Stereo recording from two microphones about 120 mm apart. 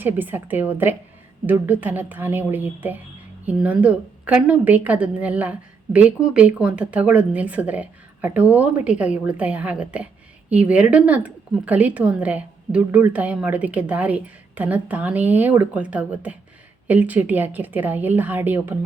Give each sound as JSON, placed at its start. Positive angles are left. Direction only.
{"t": 0.0, "sound": "a woman's voice", "side_deg": -15}